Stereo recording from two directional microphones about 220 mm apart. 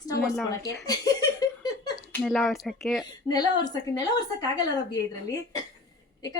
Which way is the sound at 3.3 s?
20° left (ahead or behind).